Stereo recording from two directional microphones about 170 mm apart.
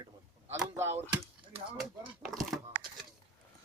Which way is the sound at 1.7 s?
Centre (ahead or behind).